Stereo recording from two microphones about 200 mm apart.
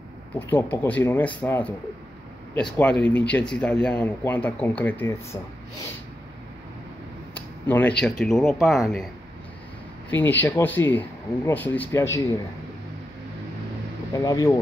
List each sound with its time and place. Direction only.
0.4 s speech: 10° left (ahead or behind)
7.3 s a sound: 10° left (ahead or behind)
8.0 s speech: centre (ahead or behind)
10.1 s speech: 10° left (ahead or behind)
14.1 s speech: 15° left (ahead or behind)